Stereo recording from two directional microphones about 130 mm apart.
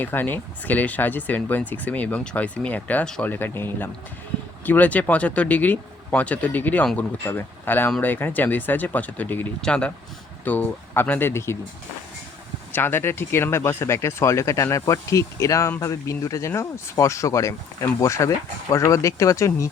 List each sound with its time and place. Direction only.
0.0 s speech: 15° left (ahead or behind)
12.7 s speech: 15° left (ahead or behind)